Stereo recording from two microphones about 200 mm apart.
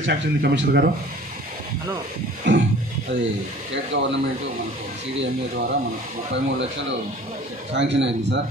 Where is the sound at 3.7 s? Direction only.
65° right (ahead or behind).